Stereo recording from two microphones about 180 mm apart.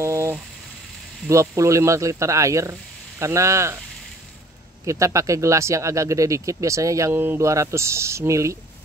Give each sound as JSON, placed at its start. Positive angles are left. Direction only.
{"t": 0.0, "sound": "a sound", "side_deg": -15}
{"t": 1.3, "sound": "speech", "side_deg": -15}
{"t": 4.8, "sound": "speech", "side_deg": -15}